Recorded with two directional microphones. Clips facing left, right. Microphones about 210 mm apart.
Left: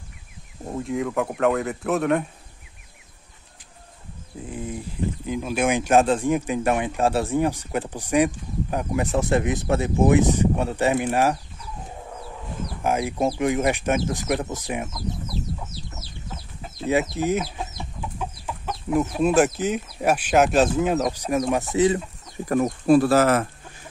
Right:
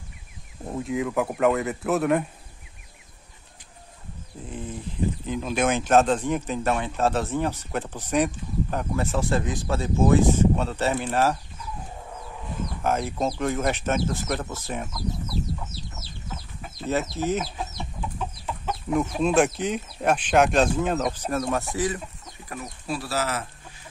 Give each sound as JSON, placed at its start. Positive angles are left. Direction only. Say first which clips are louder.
{"t": 0.7, "sound": "speech", "louder": "left 1 dB", "side_deg": 0}
{"t": 4.5, "sound": "a sound", "louder": "left 3 dB", "side_deg": 10}
{"t": 5.2, "sound": "speech", "louder": "left 2 dB", "side_deg": 10}
{"t": 12.8, "sound": "speech", "louder": "left 3 dB", "side_deg": 10}
{"t": 16.8, "sound": "speech", "louder": "left 4 dB", "side_deg": 15}
{"t": 22.5, "sound": "speech", "louder": "left 15 dB", "side_deg": 50}